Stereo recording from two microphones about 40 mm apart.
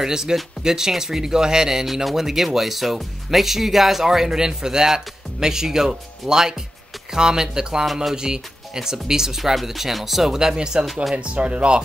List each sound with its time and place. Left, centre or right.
0.0 s speech: centre
7.8 s speech: centre
8.2 s speech: centre